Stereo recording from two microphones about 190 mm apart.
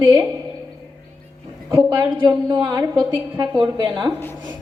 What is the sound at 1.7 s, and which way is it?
A woman's voice, 15° right (ahead or behind).